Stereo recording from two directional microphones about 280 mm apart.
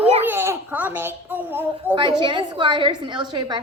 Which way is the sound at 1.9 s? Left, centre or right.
Centre.